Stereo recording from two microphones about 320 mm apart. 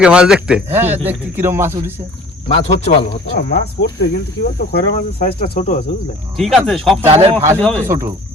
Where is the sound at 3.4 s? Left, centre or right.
Left.